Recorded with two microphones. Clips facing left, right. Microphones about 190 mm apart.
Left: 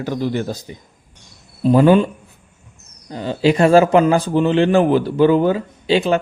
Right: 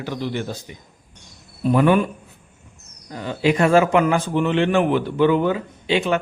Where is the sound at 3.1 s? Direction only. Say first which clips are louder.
Left 4 dB; 30° left (ahead or behind).